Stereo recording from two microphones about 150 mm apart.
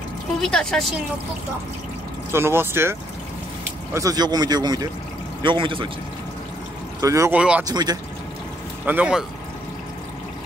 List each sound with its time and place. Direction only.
0.4 s a woman's voice: 5° left (ahead or behind)
2.3 s speech: 15° right (ahead or behind); by 5.9 s 35° right (ahead or behind)
7.0 s speech: 20° right (ahead or behind)
7.3 s speech: 5° right (ahead or behind)
7.6 s speech: 25° right (ahead or behind)
8.8 s speech: 10° right (ahead or behind)